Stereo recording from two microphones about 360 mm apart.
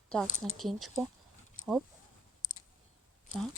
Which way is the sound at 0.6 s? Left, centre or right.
Centre.